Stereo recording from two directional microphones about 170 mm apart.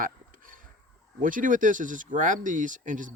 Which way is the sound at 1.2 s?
50° right (ahead or behind).